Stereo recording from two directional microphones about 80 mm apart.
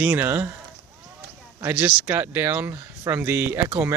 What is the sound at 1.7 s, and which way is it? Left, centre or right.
Speech, centre.